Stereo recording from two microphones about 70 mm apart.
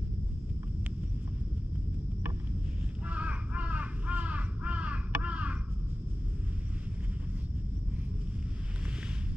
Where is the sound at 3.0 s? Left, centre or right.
Centre.